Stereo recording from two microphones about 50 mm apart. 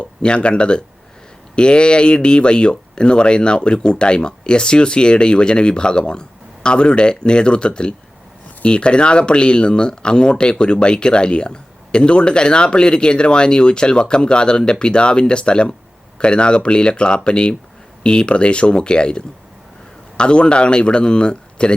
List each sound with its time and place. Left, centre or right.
0.0 s speech: centre